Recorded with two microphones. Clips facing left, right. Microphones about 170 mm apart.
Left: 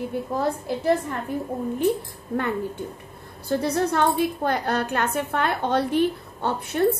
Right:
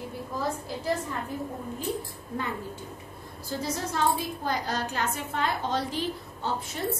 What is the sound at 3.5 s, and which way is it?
A woman's voice, 65° left (ahead or behind).